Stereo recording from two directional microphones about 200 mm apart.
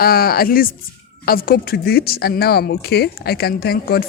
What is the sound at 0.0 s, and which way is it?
Speech, 50° left (ahead or behind).